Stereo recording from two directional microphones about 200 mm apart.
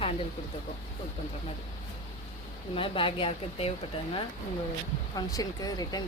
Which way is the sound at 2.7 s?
25° left (ahead or behind).